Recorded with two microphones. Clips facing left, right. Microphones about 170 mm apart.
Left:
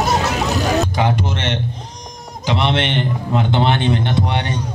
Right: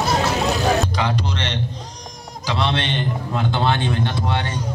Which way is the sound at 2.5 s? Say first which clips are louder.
Left 4 dB; 20° left (ahead or behind).